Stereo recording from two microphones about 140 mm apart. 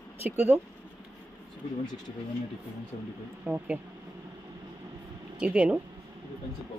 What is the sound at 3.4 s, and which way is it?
Speech, 10° right (ahead or behind).